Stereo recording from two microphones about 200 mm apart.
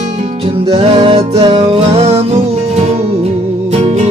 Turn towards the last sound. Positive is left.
turn(degrees=-35)  # may be behind; listen again after turning